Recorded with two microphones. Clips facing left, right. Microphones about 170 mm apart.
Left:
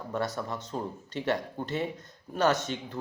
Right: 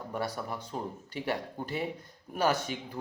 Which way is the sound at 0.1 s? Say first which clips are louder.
Left 3 dB; 10° right (ahead or behind).